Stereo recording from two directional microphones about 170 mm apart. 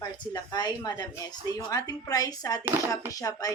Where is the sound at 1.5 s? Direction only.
20° left (ahead or behind).